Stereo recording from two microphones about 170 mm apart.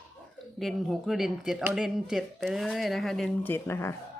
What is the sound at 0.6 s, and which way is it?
Speech, centre (ahead or behind).